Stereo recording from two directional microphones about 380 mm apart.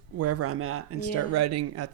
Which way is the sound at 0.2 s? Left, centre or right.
Right.